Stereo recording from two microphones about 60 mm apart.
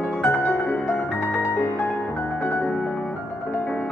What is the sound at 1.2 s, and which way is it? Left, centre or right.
Music, left.